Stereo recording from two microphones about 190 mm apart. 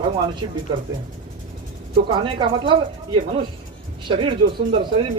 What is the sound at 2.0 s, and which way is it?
Speech, 25° right (ahead or behind).